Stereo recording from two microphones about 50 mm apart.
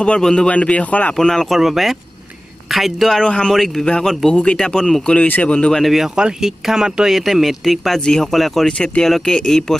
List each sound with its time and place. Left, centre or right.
0.0 s a man's voice: centre
1.1 s speech: centre
1.5 s speech: centre
3.1 s speech: centre
3.5 s speech: centre
5.2 s a man's voice: left
5.9 s speech: centre
8.6 s a man's voice: centre